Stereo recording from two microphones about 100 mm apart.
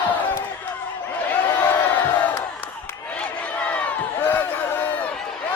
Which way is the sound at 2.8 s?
15° left (ahead or behind).